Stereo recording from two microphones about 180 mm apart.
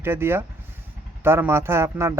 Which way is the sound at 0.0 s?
15° right (ahead or behind).